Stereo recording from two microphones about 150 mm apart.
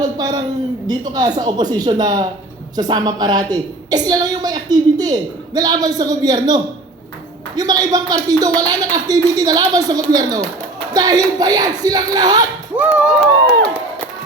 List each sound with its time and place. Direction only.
0.0 s a woman's voice: 25° right (ahead or behind)
12.7 s speech: 5° right (ahead or behind)